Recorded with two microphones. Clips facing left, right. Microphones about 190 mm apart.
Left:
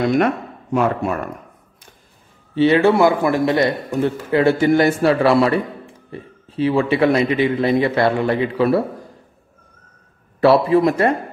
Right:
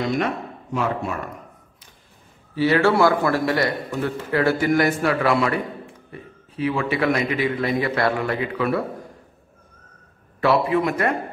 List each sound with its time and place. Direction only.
0.7 s speech: 55° left (ahead or behind)
2.5 s a man's voice: 25° left (ahead or behind)
10.4 s a man's voice: 35° left (ahead or behind)